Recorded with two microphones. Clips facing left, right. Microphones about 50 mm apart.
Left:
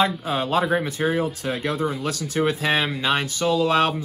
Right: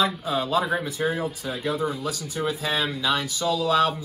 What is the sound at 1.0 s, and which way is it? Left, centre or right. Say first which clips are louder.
Speech: left 3 dB; left.